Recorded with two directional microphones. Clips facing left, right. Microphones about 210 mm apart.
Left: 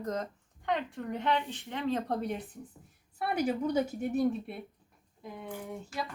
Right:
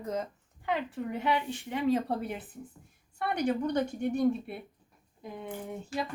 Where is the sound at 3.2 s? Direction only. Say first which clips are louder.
Right 1 dB; 5° left (ahead or behind).